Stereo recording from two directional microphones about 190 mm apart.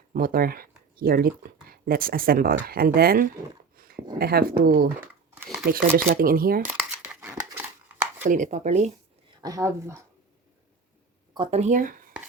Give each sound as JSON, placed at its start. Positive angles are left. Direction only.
{"t": 0.1, "sound": "speech", "side_deg": -50}
{"t": 3.8, "sound": "a sound", "side_deg": -50}
{"t": 4.2, "sound": "speech", "side_deg": -55}
{"t": 4.9, "sound": "a sound", "side_deg": -10}
{"t": 5.6, "sound": "speech", "side_deg": -50}
{"t": 6.7, "sound": "crumpling", "side_deg": -10}
{"t": 8.2, "sound": "speech", "side_deg": -40}
{"t": 9.4, "sound": "speech", "side_deg": -20}
{"t": 11.3, "sound": "speech", "side_deg": -35}